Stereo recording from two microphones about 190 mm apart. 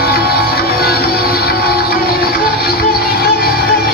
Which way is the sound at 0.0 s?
55° left (ahead or behind).